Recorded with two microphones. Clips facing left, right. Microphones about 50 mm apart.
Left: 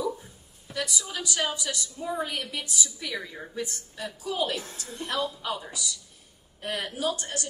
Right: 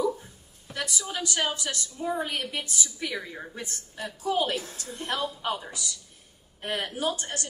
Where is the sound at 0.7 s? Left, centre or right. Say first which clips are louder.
Left 1 dB; centre.